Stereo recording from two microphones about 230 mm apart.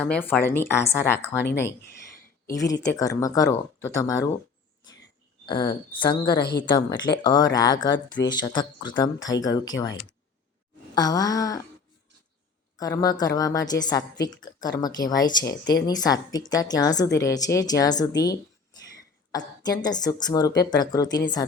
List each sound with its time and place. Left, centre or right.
0.0 s speech: centre
2.5 s speech: centre
5.5 s speech: left
6.4 s speech: left
6.7 s speech: centre
12.7 s speech: centre
19.6 s speech: centre